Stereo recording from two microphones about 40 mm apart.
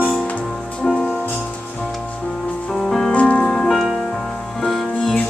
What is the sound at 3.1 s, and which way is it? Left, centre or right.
Music, left.